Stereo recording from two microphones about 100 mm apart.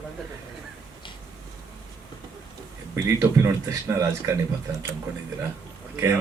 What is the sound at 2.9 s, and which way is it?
Speech, 25° right (ahead or behind).